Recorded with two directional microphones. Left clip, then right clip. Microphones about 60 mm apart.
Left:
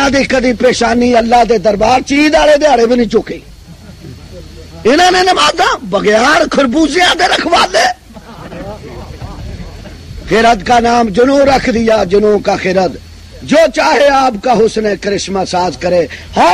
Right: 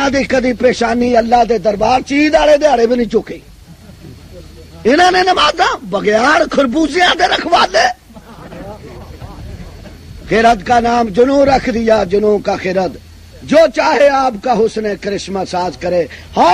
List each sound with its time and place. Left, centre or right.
0.0 s speech: right
4.8 s speech: centre
8.5 s vehicle: right
10.2 s speech: centre